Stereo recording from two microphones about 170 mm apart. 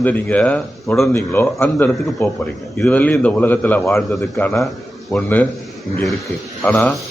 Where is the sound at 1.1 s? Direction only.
15° left (ahead or behind).